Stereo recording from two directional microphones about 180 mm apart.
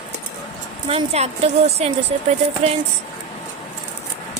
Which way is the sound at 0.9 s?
35° right (ahead or behind).